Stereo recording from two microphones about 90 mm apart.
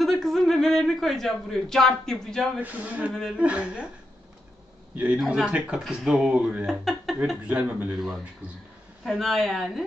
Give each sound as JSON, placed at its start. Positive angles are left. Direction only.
{"t": 0.0, "sound": "speech", "side_deg": 5}
{"t": 2.6, "sound": "speech", "side_deg": -15}
{"t": 4.9, "sound": "a man's voice", "side_deg": -15}
{"t": 6.7, "sound": "speech", "side_deg": 0}
{"t": 7.4, "sound": "speech", "side_deg": -15}
{"t": 9.2, "sound": "speech", "side_deg": 5}